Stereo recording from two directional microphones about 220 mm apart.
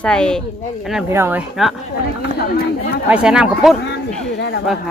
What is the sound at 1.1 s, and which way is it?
Speech, 10° right (ahead or behind).